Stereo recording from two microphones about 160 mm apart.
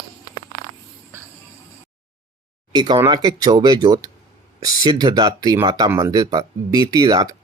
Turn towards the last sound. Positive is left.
turn(degrees=-25)  # may be behind; listen again after turning